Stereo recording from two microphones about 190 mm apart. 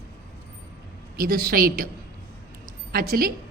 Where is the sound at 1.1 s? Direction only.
50° right (ahead or behind).